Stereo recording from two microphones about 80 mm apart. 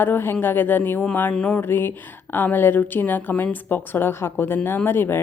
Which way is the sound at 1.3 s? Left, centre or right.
Centre.